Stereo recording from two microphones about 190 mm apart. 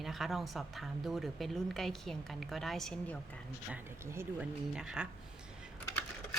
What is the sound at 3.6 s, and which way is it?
A woman's voice, 10° right (ahead or behind).